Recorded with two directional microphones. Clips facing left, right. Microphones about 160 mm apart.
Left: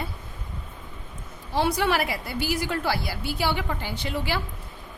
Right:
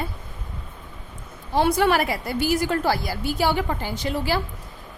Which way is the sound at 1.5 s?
50° right (ahead or behind).